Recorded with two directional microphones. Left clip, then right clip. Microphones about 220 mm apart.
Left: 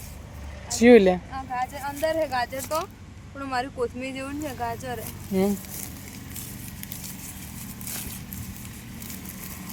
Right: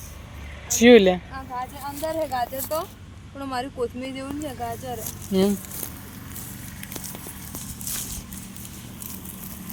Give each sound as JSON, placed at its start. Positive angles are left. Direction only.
{"t": 0.7, "sound": "speech", "side_deg": 0}